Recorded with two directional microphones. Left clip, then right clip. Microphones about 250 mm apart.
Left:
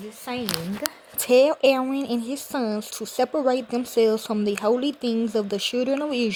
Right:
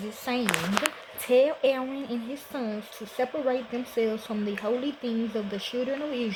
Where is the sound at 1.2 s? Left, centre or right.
Left.